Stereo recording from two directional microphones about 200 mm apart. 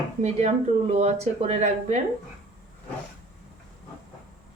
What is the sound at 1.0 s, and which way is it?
A woman's voice, 35° right (ahead or behind).